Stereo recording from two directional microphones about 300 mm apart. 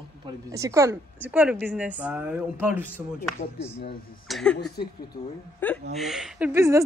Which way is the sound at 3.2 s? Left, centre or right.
Left.